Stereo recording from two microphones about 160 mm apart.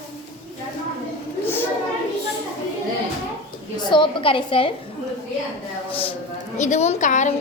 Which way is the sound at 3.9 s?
30° left (ahead or behind).